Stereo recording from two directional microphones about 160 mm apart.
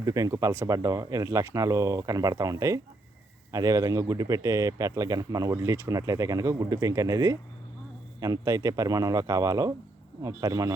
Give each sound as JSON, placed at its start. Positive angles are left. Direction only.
{"t": 0.0, "sound": "speech", "side_deg": -20}